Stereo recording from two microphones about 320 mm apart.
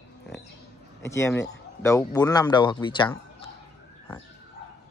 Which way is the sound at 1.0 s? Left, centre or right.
Centre.